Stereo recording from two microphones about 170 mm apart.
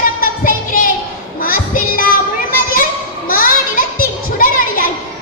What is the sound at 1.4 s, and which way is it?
Child singing, 55° left (ahead or behind).